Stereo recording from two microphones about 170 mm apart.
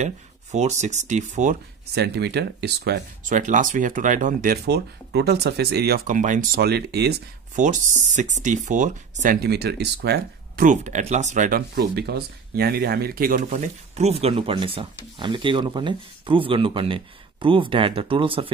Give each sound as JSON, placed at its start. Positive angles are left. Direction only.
{"t": 0.0, "sound": "speech", "side_deg": -40}
{"t": 2.0, "sound": "speech", "side_deg": -75}
{"t": 3.3, "sound": "speech", "side_deg": -50}
{"t": 4.6, "sound": "speech", "side_deg": -75}
{"t": 7.5, "sound": "speech", "side_deg": -45}
{"t": 9.2, "sound": "speech", "side_deg": -60}
{"t": 10.6, "sound": "speech", "side_deg": -45}